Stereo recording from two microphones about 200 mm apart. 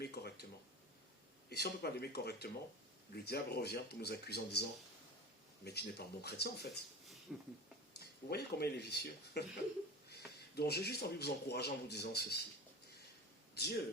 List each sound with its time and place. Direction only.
0.0 s a sound: 55° left (ahead or behind)
1.5 s speech: 55° left (ahead or behind)
7.3 s speech: centre (ahead or behind)
7.9 s speech: 50° left (ahead or behind)
13.6 s speech: 55° left (ahead or behind)